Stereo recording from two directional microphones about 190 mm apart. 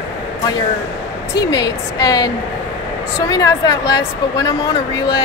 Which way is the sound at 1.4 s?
20° left (ahead or behind).